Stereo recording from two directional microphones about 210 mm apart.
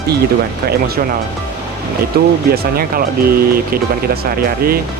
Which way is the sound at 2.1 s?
50° right (ahead or behind).